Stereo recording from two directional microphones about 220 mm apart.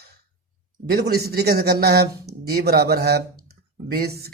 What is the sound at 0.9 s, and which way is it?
A man's voice, 45° right (ahead or behind).